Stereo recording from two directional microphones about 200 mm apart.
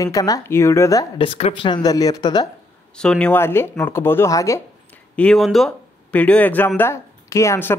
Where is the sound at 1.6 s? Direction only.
20° left (ahead or behind).